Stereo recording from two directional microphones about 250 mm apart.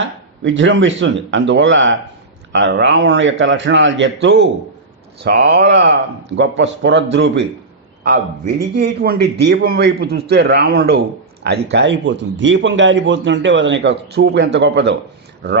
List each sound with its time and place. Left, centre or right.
0.4 s a man's voice: right